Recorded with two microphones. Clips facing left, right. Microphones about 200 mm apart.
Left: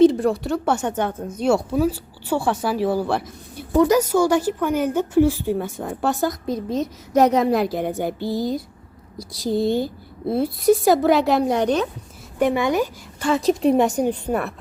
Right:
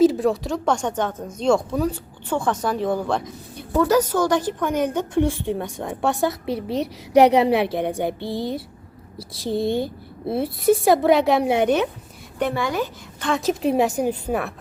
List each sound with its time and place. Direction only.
0.0 s a woman's voice: centre (ahead or behind)
6.4 s a child's voice: 75° right (ahead or behind)
7.6 s a woman's voice: centre (ahead or behind)
8.2 s speech: 25° right (ahead or behind)
9.3 s a woman's voice: centre (ahead or behind)
12.4 s a woman's voice: 15° left (ahead or behind); by 14.5 s 5° right (ahead or behind)